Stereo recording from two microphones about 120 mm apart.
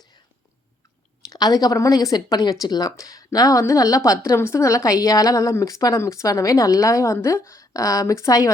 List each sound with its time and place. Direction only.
1.3 s a woman's voice: 30° left (ahead or behind)